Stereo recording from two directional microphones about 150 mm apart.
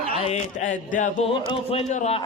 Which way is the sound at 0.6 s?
55° left (ahead or behind).